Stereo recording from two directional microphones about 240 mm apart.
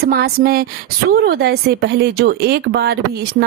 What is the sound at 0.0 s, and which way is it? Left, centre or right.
A woman's voice, right.